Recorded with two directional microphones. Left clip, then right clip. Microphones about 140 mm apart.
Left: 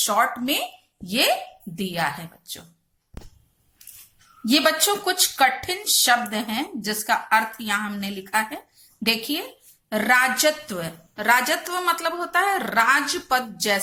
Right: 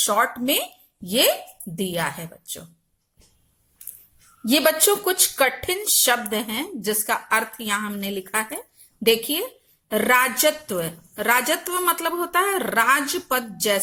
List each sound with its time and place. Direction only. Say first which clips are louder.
0.0 s speech: even; 30° right (ahead or behind)
4.4 s speech: right 1 dB; 25° right (ahead or behind)